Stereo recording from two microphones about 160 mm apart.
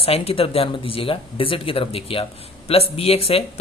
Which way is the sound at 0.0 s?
40° left (ahead or behind).